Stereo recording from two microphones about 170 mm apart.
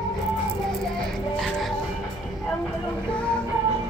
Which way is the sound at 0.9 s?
Centre (ahead or behind).